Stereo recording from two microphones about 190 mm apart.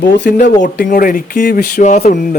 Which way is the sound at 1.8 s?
40° left (ahead or behind).